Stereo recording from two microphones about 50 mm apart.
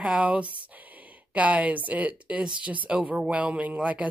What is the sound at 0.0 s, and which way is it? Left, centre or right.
A woman's voice, right.